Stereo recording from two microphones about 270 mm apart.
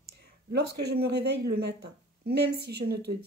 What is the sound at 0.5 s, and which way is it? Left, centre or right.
Speech, right.